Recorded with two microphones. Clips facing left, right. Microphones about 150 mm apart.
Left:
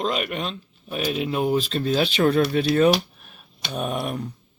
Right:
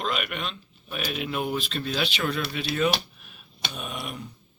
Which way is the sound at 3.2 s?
45° left (ahead or behind).